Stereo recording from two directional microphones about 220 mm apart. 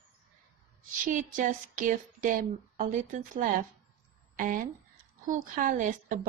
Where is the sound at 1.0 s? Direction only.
35° right (ahead or behind).